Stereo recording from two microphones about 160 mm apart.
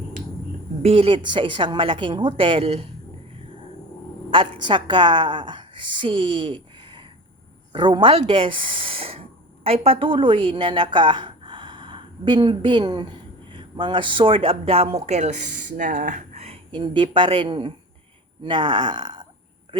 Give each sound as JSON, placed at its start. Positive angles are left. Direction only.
{"t": 0.8, "sound": "speech", "side_deg": -35}
{"t": 4.3, "sound": "a woman's voice", "side_deg": -30}